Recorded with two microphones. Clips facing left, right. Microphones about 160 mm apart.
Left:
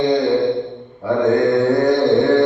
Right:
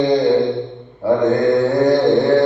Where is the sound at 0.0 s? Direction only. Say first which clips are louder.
Right 1 dB; centre (ahead or behind).